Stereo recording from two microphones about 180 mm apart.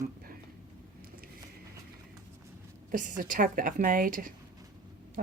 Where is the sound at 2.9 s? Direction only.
45° right (ahead or behind).